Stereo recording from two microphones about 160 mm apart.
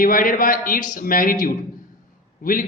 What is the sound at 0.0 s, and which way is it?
A man's voice, 60° left (ahead or behind).